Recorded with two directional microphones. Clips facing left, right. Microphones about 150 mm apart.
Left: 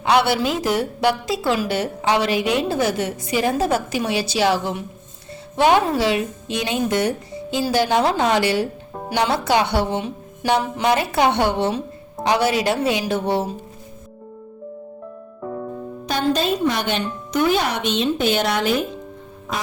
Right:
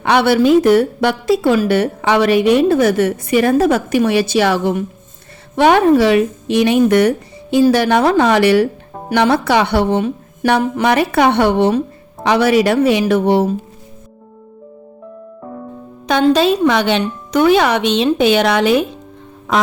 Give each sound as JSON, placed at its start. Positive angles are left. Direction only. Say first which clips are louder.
{"t": 0.0, "sound": "speech", "louder": "right 6 dB", "side_deg": -55}
{"t": 16.0, "sound": "speech", "louder": "right 8 dB", "side_deg": -90}